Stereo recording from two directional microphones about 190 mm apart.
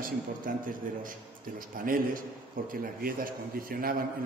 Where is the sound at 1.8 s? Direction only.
45° right (ahead or behind).